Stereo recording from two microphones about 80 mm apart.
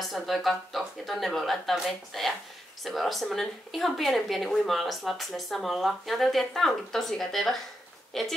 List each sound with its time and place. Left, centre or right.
0.0 s a woman's voice: centre